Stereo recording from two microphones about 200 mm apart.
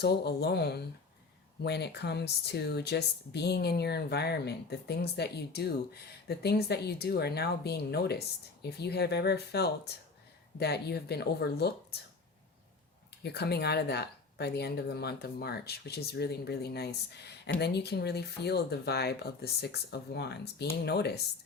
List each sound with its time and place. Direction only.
0.0 s speech: 55° left (ahead or behind)
13.2 s speech: 55° left (ahead or behind)